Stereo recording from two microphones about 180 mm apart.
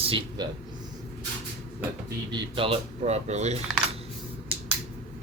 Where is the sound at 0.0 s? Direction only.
30° right (ahead or behind).